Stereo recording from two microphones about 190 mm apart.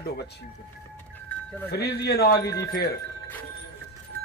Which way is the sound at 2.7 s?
60° left (ahead or behind).